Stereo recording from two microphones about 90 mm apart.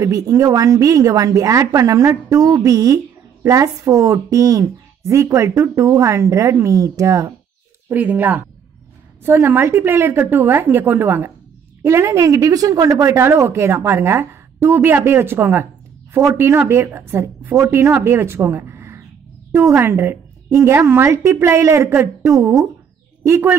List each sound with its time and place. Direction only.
0.0 s speech: 40° right (ahead or behind)
7.9 s a woman's voice: 20° right (ahead or behind)